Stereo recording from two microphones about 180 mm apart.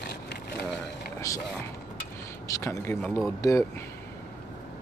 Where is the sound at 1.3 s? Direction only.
20° left (ahead or behind).